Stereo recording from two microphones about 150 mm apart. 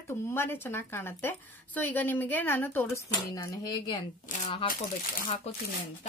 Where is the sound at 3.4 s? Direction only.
25° left (ahead or behind).